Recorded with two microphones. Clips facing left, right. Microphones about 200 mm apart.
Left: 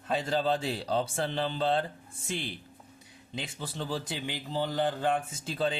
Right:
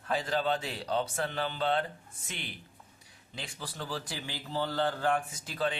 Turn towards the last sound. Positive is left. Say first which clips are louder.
# left 2 dB
turn(degrees=25)  # may be behind; listen again after turning